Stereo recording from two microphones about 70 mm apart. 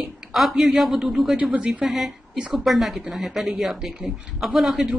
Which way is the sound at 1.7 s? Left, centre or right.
Centre.